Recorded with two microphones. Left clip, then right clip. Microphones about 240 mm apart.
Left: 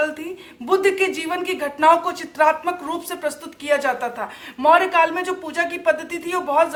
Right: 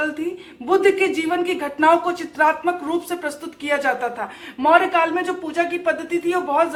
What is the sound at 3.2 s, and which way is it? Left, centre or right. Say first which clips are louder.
A woman's voice: left 2 dB; left.